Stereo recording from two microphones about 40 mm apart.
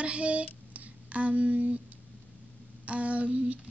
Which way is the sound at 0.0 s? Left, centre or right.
Right.